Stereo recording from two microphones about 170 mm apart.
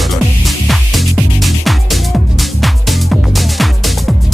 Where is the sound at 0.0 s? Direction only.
Centre (ahead or behind).